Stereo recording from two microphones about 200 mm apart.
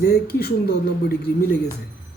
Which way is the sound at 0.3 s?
50° left (ahead or behind).